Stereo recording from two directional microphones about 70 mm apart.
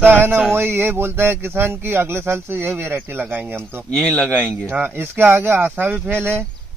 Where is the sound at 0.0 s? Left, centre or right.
Right.